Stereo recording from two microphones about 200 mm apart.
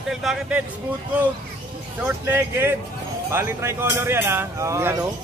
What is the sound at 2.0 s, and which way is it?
Speech, 10° right (ahead or behind).